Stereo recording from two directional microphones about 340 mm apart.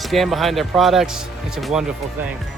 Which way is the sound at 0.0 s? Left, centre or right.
Centre.